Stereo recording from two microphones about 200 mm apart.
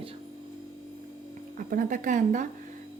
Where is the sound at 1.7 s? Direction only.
40° right (ahead or behind).